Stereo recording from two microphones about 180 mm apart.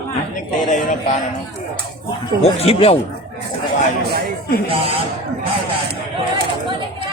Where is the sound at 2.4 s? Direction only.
35° left (ahead or behind).